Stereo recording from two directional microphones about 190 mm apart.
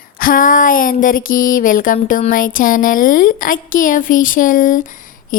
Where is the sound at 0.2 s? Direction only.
45° left (ahead or behind).